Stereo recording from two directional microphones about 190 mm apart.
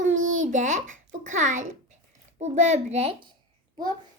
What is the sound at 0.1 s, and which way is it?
Babbling, 90° right.